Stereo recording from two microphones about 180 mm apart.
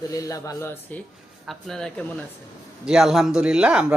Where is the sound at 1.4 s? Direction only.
Centre (ahead or behind).